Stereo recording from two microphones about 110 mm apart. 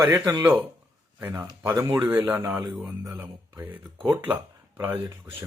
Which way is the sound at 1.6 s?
25° right (ahead or behind).